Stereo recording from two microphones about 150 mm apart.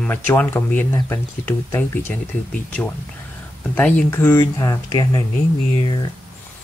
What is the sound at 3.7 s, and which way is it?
Speech, 10° left (ahead or behind).